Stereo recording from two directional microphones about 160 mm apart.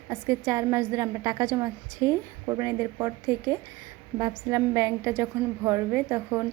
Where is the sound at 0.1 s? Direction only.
20° right (ahead or behind).